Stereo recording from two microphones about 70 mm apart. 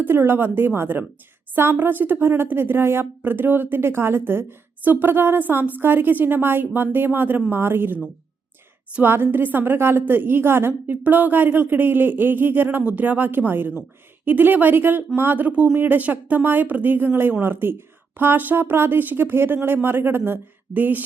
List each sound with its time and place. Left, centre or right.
0.0 s a woman's voice: right